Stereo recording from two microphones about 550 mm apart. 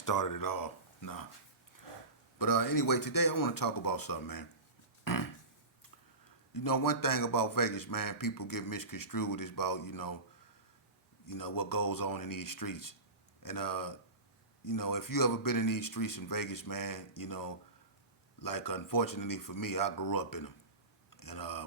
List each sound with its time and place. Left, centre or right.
0.0 s speech: left
2.4 s a man's voice: left
5.0 s a sound: left
6.5 s a man's voice: left
11.3 s a man's voice: left
21.1 s a sound: left